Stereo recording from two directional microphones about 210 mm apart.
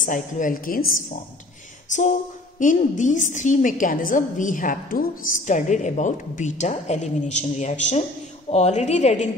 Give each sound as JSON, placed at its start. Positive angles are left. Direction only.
{"t": 0.0, "sound": "a woman's voice", "side_deg": 40}
{"t": 1.9, "sound": "a sound", "side_deg": 35}
{"t": 2.6, "sound": "a woman's voice", "side_deg": 35}